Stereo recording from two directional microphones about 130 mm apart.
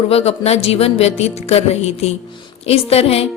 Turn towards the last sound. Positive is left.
turn(degrees=50)  # may be behind; listen again after turning